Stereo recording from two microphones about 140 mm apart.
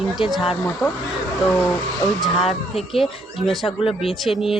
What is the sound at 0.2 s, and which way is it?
Speech, 40° left (ahead or behind).